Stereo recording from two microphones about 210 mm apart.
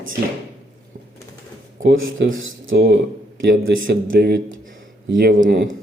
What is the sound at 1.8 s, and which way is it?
Speech, 60° right (ahead or behind).